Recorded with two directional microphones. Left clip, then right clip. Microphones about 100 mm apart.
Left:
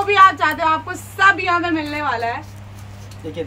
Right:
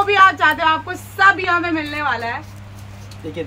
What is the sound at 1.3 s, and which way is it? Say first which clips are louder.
Speech: even; 35° left (ahead or behind).